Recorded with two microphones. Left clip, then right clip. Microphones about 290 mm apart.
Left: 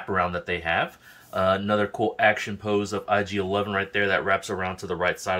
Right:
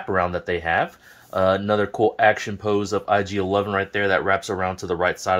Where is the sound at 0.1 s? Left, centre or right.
Centre.